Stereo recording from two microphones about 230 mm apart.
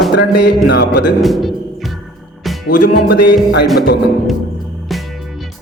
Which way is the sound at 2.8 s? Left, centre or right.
Left.